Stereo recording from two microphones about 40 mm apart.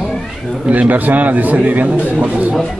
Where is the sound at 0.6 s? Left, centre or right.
Right.